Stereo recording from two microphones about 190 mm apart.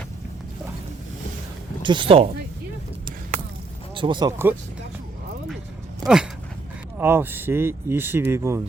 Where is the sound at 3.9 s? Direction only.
25° right (ahead or behind).